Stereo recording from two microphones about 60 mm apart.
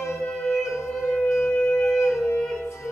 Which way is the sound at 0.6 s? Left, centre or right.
Left.